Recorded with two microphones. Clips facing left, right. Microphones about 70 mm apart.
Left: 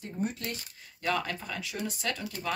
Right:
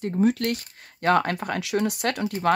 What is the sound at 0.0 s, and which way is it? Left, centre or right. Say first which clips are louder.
Speech: right 12 dB; right.